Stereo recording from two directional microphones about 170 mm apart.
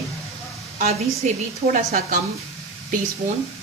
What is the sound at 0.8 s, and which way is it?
A woman's voice, 45° right (ahead or behind).